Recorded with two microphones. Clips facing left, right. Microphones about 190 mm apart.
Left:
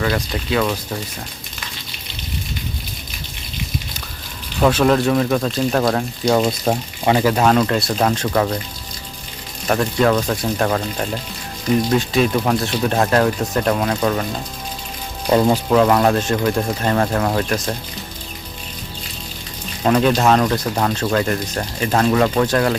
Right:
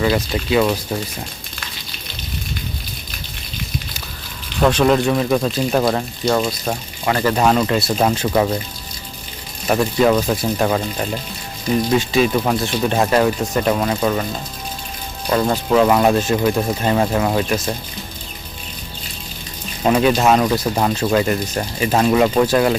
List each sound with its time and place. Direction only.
0.0 s speech: 10° right (ahead or behind)
4.6 s speech: centre (ahead or behind)
6.4 s speech: 25° left (ahead or behind)
7.2 s speech: 10° left (ahead or behind)
7.4 s speech: 5° right (ahead or behind)
9.6 s speech: 5° right (ahead or behind)
15.4 s speech: 10° left (ahead or behind)
15.7 s speech: 5° right (ahead or behind)
19.8 s speech: 5° right (ahead or behind)